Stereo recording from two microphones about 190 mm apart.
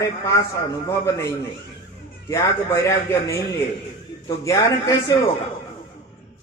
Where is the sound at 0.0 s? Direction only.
15° left (ahead or behind).